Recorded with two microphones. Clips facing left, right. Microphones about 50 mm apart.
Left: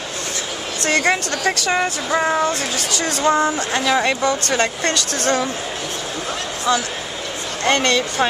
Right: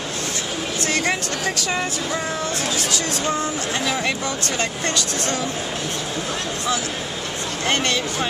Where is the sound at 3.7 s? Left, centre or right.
Left.